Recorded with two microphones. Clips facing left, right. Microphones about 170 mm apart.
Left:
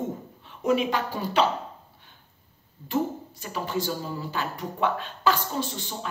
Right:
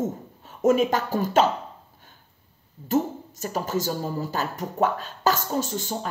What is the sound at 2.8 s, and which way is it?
Speech, 45° right (ahead or behind).